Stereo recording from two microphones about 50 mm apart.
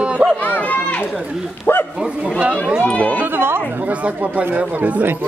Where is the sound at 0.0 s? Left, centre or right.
Centre.